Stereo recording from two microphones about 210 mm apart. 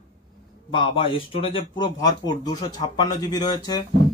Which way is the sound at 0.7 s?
25° left (ahead or behind).